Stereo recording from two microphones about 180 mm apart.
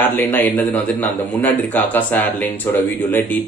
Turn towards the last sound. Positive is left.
turn(degrees=10)  # may be behind; listen again after turning